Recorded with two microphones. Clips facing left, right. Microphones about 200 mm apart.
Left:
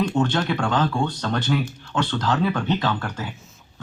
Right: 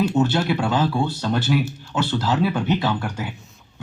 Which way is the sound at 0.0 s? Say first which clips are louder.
Right 2 dB; 5° right (ahead or behind).